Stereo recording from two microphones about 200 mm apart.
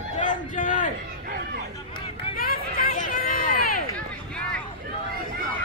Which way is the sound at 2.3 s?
45° left (ahead or behind).